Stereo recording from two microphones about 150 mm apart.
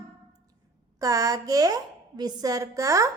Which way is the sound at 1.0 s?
25° right (ahead or behind).